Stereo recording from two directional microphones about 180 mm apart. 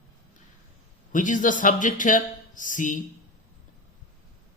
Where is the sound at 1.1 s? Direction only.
45° left (ahead or behind).